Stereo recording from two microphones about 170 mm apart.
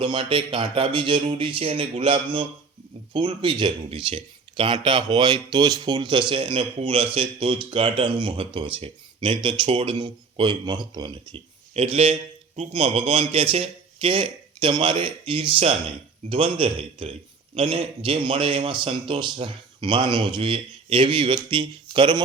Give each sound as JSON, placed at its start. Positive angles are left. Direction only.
{"t": 0.0, "sound": "speech", "side_deg": -30}